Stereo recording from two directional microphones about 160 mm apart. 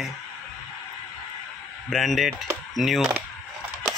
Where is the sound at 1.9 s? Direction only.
Centre (ahead or behind).